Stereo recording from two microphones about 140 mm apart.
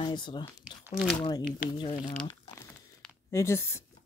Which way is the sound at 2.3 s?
20° left (ahead or behind).